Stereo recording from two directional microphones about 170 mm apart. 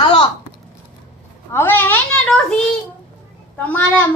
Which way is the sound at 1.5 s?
10° left (ahead or behind).